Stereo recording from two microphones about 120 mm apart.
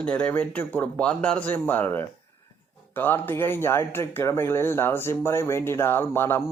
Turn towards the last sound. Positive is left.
turn(degrees=20)  # may be behind; listen again after turning